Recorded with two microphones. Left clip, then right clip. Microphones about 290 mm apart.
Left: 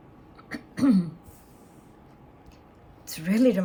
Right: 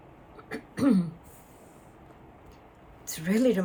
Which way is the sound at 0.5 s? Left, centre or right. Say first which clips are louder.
Left 2 dB; centre.